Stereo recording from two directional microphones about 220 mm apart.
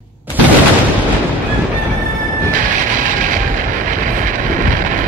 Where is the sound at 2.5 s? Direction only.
35° right (ahead or behind).